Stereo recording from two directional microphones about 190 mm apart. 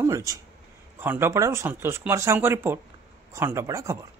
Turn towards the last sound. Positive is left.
turn(degrees=-15)  # may be behind; listen again after turning